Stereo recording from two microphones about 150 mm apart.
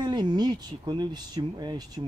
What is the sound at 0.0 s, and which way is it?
Speech, 30° right (ahead or behind).